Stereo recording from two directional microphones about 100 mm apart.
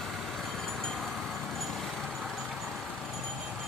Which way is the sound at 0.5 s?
5° left (ahead or behind).